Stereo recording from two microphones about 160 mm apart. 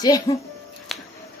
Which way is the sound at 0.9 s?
Centre (ahead or behind).